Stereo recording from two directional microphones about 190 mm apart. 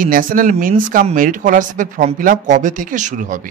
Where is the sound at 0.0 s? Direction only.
45° right (ahead or behind).